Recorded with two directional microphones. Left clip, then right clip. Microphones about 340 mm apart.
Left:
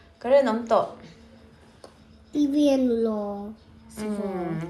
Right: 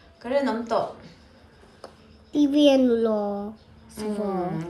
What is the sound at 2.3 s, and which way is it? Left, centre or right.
Speech, centre.